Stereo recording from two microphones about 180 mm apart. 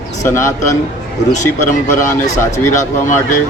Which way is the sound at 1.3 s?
40° left (ahead or behind).